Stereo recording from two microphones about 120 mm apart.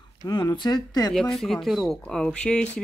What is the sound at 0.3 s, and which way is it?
Speech, 35° left (ahead or behind).